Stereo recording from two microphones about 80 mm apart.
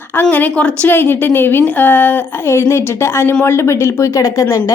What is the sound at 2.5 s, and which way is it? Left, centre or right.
Speech, left.